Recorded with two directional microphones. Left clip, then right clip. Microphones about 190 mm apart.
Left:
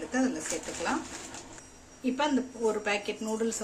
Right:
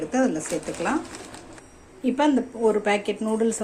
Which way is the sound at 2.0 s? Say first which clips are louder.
Right 7 dB; 15° right (ahead or behind).